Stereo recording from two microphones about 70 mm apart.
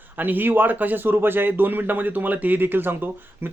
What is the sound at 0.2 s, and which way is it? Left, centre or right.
A man's voice, right.